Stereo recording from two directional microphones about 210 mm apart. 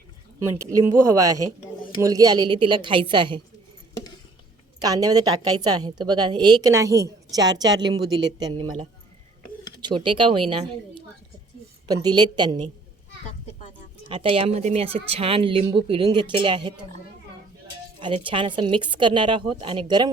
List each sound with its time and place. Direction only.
0.3 s a woman's voice: 15° right (ahead or behind)
4.8 s a woman's voice: 15° right (ahead or behind)
11.9 s a woman's voice: 20° right (ahead or behind)
14.1 s a woman's voice: 25° right (ahead or behind)
18.0 s a woman's voice: 25° right (ahead or behind)